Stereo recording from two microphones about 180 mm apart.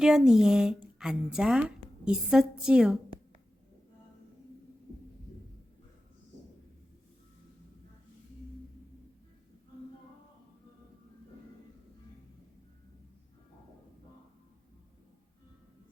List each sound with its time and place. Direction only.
0.0 s speech: 5° right (ahead or behind)